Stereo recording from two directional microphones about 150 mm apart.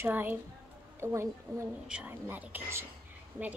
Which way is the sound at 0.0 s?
15° right (ahead or behind).